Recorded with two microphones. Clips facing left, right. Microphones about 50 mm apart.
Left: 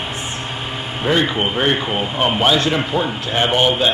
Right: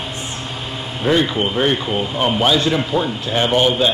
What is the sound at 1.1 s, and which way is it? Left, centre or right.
A man's voice, left.